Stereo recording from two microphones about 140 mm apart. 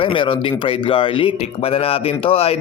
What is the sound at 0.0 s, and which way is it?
A man's voice, 35° left (ahead or behind).